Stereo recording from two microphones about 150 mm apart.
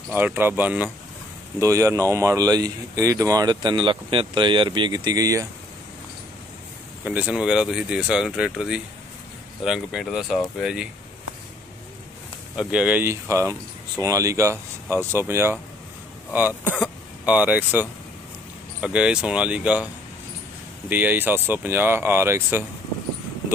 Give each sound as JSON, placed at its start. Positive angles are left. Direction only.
{"t": 0.1, "sound": "speech", "side_deg": -15}
{"t": 7.1, "sound": "speech", "side_deg": -10}
{"t": 12.5, "sound": "speech", "side_deg": -10}
{"t": 16.8, "sound": "speech", "side_deg": -10}
{"t": 20.9, "sound": "speech", "side_deg": -10}